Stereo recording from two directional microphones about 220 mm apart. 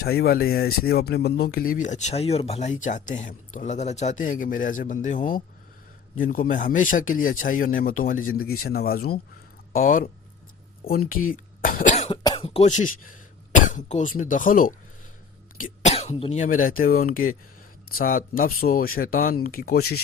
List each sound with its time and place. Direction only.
0.0 s speech: 45° left (ahead or behind)
11.1 s speech: 40° left (ahead or behind)